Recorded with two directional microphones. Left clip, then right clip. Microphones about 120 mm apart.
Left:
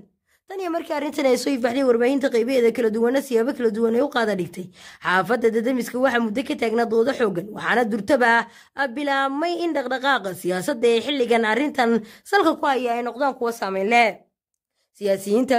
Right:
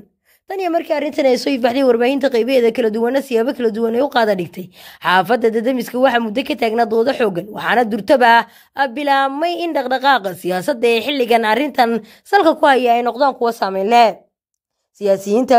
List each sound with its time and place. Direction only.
0.5 s speech: 35° right (ahead or behind)
0.8 s speech: 20° right (ahead or behind)
1.6 s speech: 30° right (ahead or behind)
12.5 s speech: 40° right (ahead or behind)
13.2 s speech: 20° right (ahead or behind)